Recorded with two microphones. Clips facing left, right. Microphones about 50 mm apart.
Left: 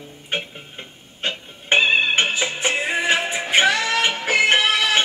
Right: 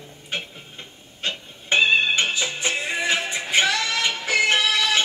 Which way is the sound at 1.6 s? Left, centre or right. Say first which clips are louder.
Left 1 dB; left.